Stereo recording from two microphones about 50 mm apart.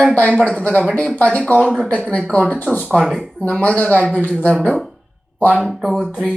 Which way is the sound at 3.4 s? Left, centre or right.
Left.